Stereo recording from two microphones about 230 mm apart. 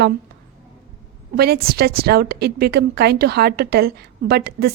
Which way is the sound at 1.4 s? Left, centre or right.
Right.